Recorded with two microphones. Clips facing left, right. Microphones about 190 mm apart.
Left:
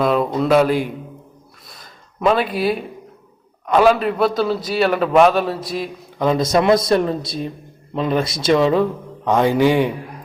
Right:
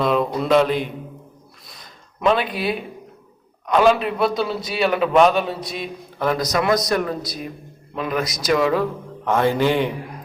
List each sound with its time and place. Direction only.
0.0 s a sound: centre (ahead or behind)
0.4 s a man's voice: 5° left (ahead or behind)
6.1 s a man's voice: 20° left (ahead or behind)